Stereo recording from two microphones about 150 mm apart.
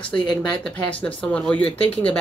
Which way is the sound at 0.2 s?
5° left (ahead or behind).